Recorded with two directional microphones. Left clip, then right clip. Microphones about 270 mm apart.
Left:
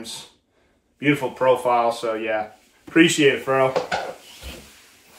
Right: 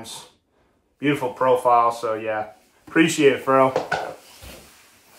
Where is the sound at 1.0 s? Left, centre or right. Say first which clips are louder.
Left 1 dB; centre.